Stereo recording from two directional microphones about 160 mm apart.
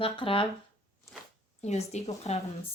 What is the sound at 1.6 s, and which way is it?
Speech, 45° left (ahead or behind).